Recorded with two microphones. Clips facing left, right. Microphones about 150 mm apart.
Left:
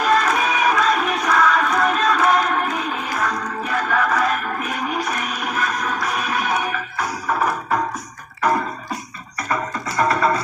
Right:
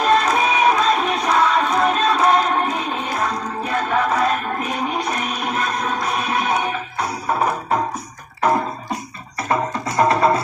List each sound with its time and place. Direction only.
0.0 s music: 25° right (ahead or behind)
9.5 s music: 25° right (ahead or behind)